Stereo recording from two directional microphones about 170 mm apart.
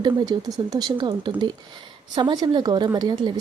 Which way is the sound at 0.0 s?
25° right (ahead or behind).